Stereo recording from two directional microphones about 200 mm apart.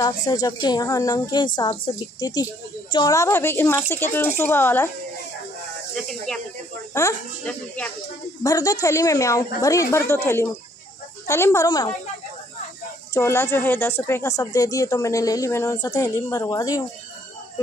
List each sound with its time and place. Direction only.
0.0 s a woman's voice: 20° left (ahead or behind)
5.9 s speech: centre (ahead or behind)
6.9 s speech: 15° left (ahead or behind)
8.5 s speech: 15° left (ahead or behind)
13.1 s speech: 15° left (ahead or behind)